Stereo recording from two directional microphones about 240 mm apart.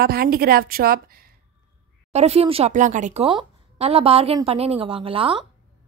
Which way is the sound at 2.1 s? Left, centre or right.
Right.